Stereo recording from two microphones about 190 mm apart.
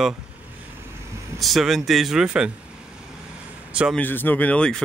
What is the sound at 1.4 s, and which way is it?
Speech, centre (ahead or behind).